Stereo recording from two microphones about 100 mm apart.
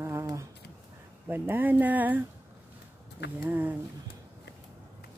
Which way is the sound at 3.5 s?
20° right (ahead or behind).